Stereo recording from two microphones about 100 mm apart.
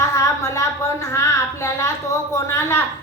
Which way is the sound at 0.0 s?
30° left (ahead or behind).